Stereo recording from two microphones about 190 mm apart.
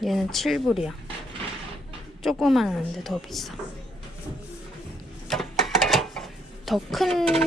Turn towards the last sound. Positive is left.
turn(degrees=0)  # may be behind; listen again after turning